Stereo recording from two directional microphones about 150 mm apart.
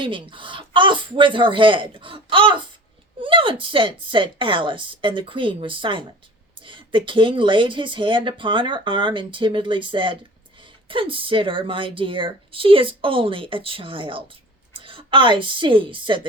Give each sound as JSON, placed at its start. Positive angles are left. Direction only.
{"t": 0.0, "sound": "a woman's voice", "side_deg": -35}